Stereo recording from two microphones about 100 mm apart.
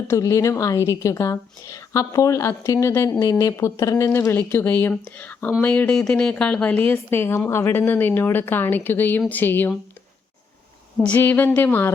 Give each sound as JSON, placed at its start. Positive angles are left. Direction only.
{"t": 0.1, "sound": "a woman's voice", "side_deg": 35}
{"t": 11.0, "sound": "speech", "side_deg": 15}